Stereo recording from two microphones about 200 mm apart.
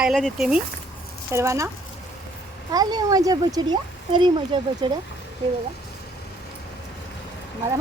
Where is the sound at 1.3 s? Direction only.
15° right (ahead or behind).